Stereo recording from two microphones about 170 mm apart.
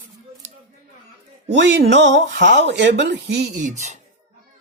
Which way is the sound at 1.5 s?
90° right.